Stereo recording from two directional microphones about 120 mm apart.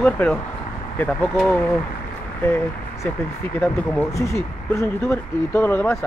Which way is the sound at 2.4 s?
20° left (ahead or behind).